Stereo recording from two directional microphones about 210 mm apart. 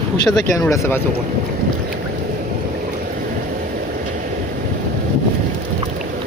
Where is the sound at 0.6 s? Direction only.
10° left (ahead or behind).